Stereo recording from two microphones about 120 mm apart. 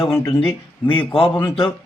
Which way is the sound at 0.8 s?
45° left (ahead or behind).